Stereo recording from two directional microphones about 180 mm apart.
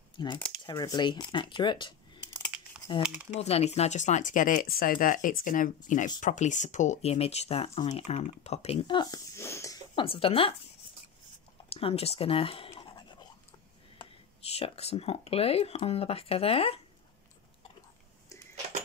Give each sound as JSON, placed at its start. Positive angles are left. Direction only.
{"t": 0.2, "sound": "speech", "side_deg": 25}
{"t": 3.0, "sound": "speech", "side_deg": -5}
{"t": 3.3, "sound": "speech", "side_deg": 35}
{"t": 10.0, "sound": "speech", "side_deg": 30}
{"t": 11.7, "sound": "writing", "side_deg": 35}
{"t": 14.0, "sound": "a sound", "side_deg": 25}
{"t": 14.5, "sound": "speech", "side_deg": 35}